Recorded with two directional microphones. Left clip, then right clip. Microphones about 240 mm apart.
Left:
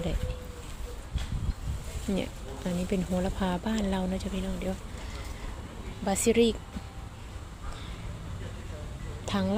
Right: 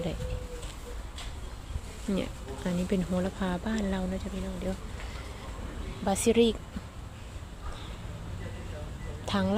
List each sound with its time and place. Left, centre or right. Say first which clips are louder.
2.1 s speech: even; centre
6.1 s speech: even; centre
9.2 s speech: right 1 dB; centre